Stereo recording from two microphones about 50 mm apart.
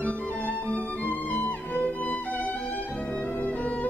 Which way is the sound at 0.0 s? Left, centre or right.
Left.